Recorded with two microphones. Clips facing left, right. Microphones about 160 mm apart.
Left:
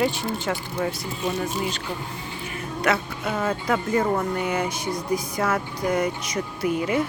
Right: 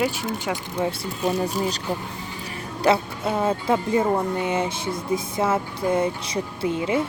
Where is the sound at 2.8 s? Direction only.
30° right (ahead or behind).